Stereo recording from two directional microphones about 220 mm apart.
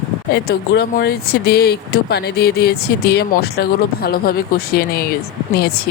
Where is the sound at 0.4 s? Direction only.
45° left (ahead or behind).